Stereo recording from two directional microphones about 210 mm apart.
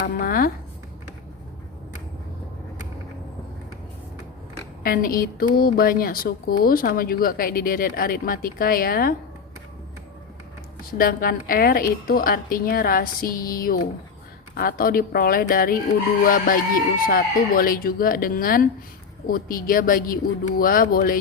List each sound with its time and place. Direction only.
0.0 s a woman's voice: 45° left (ahead or behind)
4.8 s a woman's voice: 45° left (ahead or behind)
10.9 s a woman's voice: 45° left (ahead or behind)